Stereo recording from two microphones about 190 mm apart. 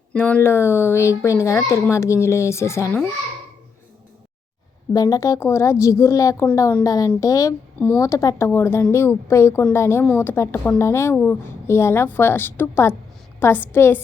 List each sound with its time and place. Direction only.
0.1 s a woman's voice: 5° left (ahead or behind)
4.9 s a woman's voice: 20° left (ahead or behind)